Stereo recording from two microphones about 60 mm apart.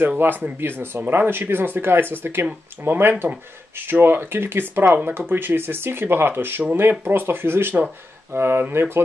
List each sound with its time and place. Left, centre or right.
0.2 s speech: right